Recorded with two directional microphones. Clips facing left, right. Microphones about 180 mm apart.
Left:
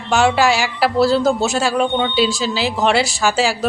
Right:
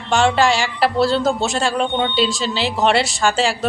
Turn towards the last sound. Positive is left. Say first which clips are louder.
# left 1 dB
turn(degrees=5)  # may be behind; listen again after turning